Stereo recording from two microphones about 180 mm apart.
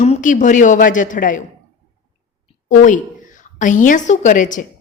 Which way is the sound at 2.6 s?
45° left (ahead or behind).